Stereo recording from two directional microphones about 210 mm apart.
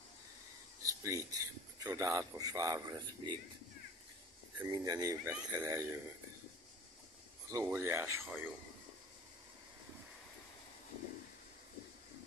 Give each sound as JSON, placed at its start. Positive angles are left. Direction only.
{"t": 0.8, "sound": "a man's voice", "side_deg": -15}
{"t": 4.6, "sound": "a man's voice", "side_deg": -20}
{"t": 7.4, "sound": "a man's voice", "side_deg": -15}